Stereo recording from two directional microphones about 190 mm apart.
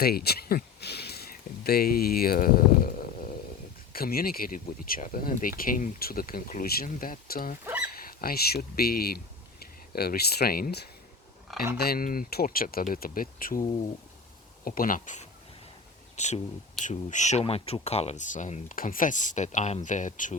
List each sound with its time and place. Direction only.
0.0 s a sound: 55° left (ahead or behind)
3.9 s speech: 50° left (ahead or behind)
7.6 s pig: 10° right (ahead or behind)
7.9 s speech: 50° left (ahead or behind)